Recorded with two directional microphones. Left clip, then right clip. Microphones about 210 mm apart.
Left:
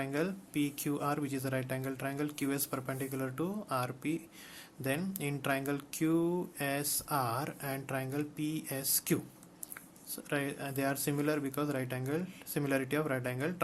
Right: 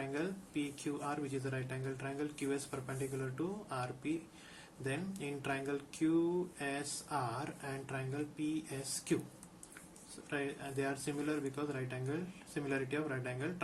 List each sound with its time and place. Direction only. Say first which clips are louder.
0.0 s speech: left 5 dB; 50° left (ahead or behind)
10.2 s speech: left 4 dB; 50° left (ahead or behind)